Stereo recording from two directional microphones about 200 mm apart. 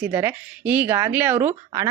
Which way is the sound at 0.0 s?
10° right (ahead or behind).